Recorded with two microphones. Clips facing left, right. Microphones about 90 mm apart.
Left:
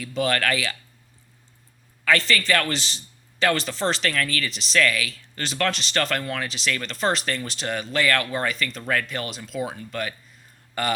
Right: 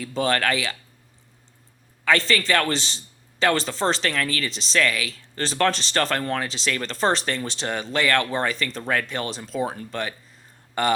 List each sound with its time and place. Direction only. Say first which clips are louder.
0.0 s speech: right 1 dB; 30° right (ahead or behind)
2.0 s speech: right 1 dB; 25° right (ahead or behind)